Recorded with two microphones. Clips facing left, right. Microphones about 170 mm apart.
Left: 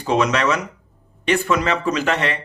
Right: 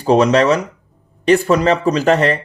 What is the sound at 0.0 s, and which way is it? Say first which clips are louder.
Speech: right 7 dB; 35° right (ahead or behind).